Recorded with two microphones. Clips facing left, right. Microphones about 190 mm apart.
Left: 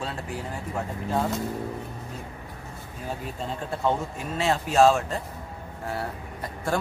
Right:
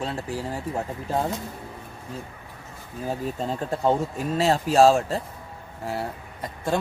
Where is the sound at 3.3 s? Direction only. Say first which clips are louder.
Right 4 dB; 40° right (ahead or behind).